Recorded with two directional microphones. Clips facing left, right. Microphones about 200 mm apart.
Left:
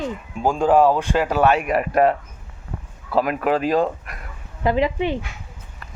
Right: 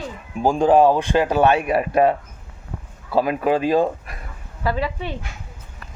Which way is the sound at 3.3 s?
20° right (ahead or behind).